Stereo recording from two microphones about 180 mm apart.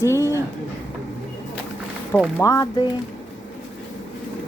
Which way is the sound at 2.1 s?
5° left (ahead or behind).